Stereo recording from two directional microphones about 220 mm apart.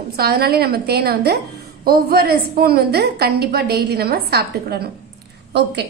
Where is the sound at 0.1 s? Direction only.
45° right (ahead or behind).